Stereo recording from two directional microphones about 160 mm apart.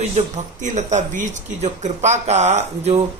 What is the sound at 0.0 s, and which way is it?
Speech, 50° right (ahead or behind).